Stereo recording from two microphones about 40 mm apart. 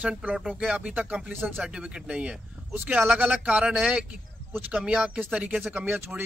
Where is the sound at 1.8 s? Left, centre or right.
Right.